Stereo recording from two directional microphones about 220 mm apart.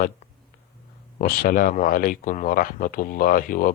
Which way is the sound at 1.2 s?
40° left (ahead or behind).